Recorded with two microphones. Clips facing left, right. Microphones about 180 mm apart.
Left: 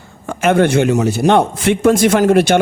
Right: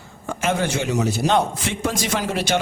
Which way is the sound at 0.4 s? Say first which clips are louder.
Left 10 dB; 60° left (ahead or behind).